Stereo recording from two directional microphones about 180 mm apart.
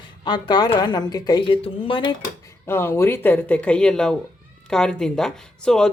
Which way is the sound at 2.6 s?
15° left (ahead or behind).